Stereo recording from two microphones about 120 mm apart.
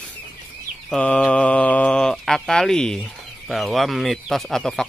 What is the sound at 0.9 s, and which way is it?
Speech, 10° left (ahead or behind).